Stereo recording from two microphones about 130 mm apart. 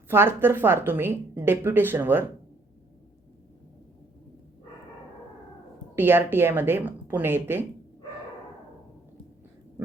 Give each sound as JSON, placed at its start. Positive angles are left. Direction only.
{"t": 0.1, "sound": "a woman's voice", "side_deg": -15}
{"t": 6.0, "sound": "a woman's voice", "side_deg": -15}